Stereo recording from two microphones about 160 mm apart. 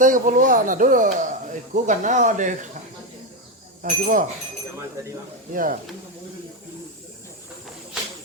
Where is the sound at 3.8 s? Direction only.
60° right (ahead or behind).